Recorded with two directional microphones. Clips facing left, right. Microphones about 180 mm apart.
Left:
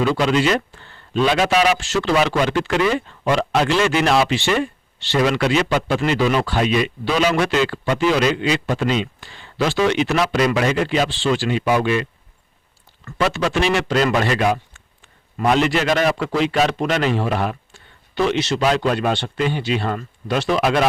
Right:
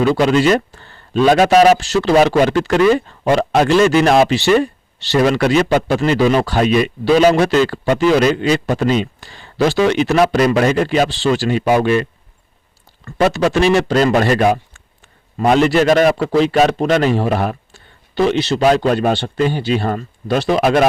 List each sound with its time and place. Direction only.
0.0 s speech: 45° right (ahead or behind)
13.1 s speech: 40° right (ahead or behind)